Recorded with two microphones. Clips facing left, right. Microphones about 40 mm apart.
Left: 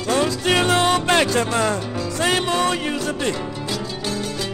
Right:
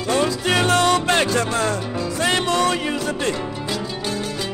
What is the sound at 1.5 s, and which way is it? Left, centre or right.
Speech, left.